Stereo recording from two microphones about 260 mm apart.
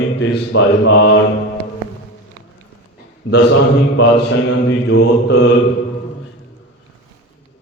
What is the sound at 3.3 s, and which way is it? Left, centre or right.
Speech, left.